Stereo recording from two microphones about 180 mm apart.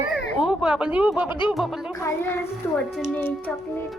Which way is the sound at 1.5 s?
Centre (ahead or behind).